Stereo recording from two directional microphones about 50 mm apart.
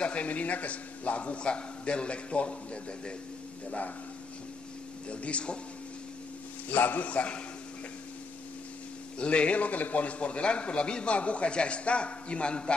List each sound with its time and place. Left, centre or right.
0.0 s a man's voice: left
5.1 s a man's voice: left
6.7 s a man's voice: left
9.2 s a man's voice: left